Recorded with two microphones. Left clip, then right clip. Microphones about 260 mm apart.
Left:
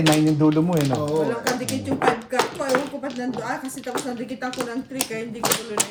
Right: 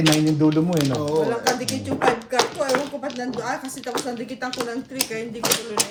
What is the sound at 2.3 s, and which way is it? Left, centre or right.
Speech, centre.